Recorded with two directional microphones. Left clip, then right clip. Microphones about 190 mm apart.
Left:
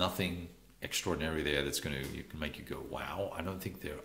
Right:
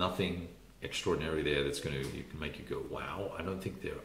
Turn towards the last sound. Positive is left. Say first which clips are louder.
# right 2 dB
turn(degrees=45)  # may be behind; listen again after turning